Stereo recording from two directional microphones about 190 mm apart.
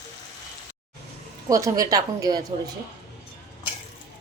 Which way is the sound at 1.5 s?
15° right (ahead or behind).